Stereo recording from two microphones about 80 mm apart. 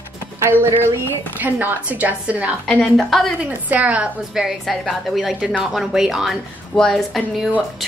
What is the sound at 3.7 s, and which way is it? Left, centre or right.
Speech, centre.